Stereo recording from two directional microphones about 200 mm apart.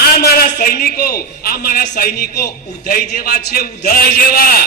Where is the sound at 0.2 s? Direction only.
50° left (ahead or behind).